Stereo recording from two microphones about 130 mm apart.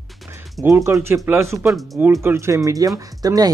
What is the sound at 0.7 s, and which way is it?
Speech, 20° right (ahead or behind).